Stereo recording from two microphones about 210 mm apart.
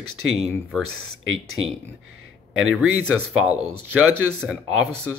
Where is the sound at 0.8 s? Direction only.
90° right.